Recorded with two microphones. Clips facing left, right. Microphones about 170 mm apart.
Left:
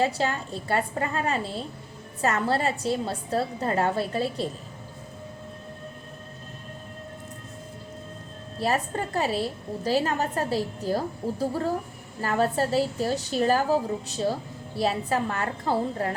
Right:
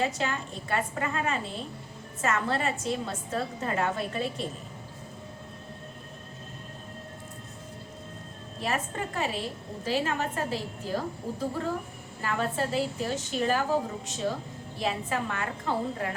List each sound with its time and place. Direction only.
0.0 s a woman's voice: 35° left (ahead or behind)
8.6 s a woman's voice: 35° left (ahead or behind)